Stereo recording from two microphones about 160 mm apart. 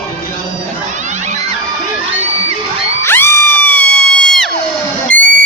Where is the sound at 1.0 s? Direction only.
50° right (ahead or behind).